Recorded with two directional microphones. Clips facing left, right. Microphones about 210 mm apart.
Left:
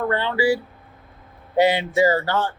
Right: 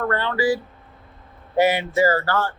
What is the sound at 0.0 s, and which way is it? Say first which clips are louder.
Speech: left 1 dB; 15° left (ahead or behind).